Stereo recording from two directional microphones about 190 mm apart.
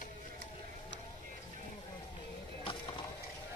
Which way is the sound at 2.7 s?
25° left (ahead or behind).